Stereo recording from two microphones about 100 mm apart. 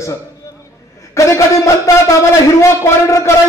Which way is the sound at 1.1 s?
30° left (ahead or behind).